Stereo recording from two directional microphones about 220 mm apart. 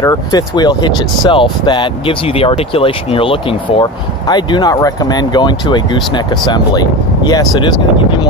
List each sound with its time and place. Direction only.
0.0 s speech: 20° left (ahead or behind)